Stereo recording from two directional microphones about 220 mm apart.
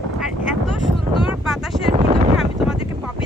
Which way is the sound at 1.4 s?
Centre (ahead or behind).